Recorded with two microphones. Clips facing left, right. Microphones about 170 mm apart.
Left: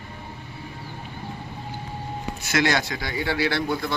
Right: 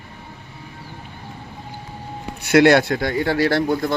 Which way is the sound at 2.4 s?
60° right (ahead or behind).